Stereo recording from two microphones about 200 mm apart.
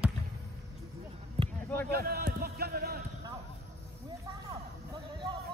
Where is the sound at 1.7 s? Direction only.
50° right (ahead or behind).